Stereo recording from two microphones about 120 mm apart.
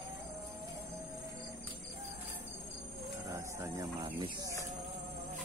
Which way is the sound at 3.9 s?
45° right (ahead or behind).